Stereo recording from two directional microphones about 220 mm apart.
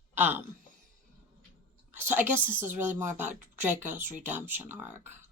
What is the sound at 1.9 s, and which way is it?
A woman's voice, 10° right (ahead or behind).